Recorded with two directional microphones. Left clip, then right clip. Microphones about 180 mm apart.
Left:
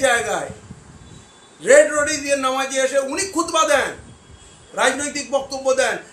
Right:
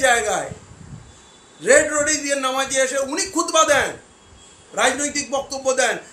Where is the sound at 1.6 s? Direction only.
10° right (ahead or behind).